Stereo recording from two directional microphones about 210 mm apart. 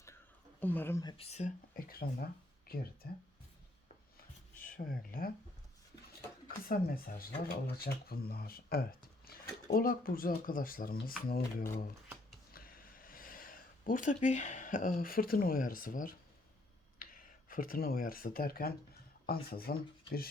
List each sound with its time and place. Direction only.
0.6 s a woman's voice: 10° left (ahead or behind)
1.1 s speech: 30° left (ahead or behind); by 3.1 s 45° left (ahead or behind)
4.6 s speech: 40° left (ahead or behind)
6.7 s speech: 45° left (ahead or behind)
12.5 s gasp: 45° left (ahead or behind)
17.0 s speech: 40° left (ahead or behind)